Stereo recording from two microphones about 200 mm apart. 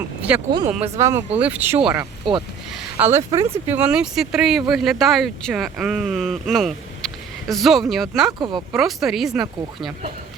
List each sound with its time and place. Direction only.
0.2 s speech: 5° right (ahead or behind)
2.0 s speech: 25° right (ahead or behind)
2.7 s speech: 10° right (ahead or behind)
8.3 s speech: 20° right (ahead or behind)
8.7 s speech: centre (ahead or behind)